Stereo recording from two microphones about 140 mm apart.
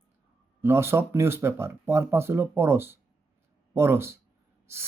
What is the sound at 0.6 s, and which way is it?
Speech, 15° right (ahead or behind).